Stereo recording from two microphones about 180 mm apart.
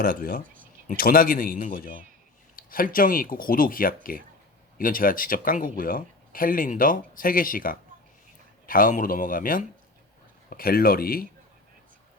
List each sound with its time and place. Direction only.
0.0 s speech: 55° left (ahead or behind)